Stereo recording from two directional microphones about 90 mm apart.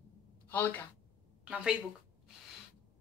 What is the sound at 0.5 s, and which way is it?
Speech, 20° left (ahead or behind).